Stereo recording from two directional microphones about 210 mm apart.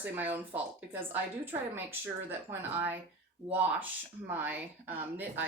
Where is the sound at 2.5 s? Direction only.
10° right (ahead or behind).